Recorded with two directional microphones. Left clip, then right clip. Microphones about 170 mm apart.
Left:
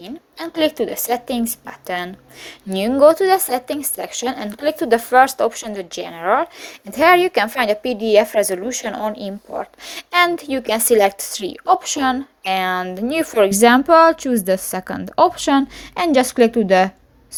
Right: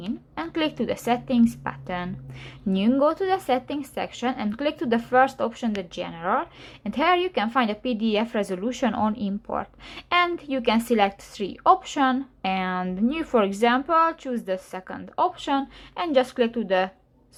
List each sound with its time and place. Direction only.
0.0 s a woman's voice: 40° left (ahead or behind)
9.8 s a woman's voice: 40° left (ahead or behind)